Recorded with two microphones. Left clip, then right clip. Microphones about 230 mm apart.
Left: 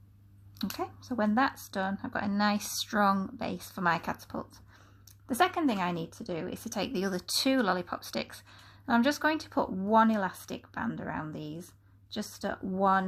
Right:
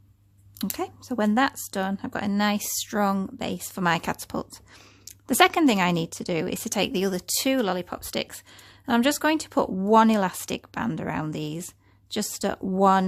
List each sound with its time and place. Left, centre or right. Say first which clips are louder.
0.6 s speech: right 5 dB; right